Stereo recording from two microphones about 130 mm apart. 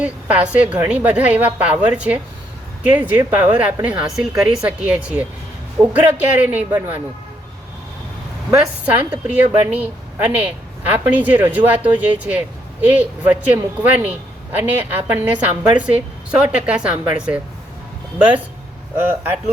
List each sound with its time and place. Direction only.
0.0 s speech: 10° right (ahead or behind)
8.5 s speech: 10° right (ahead or behind)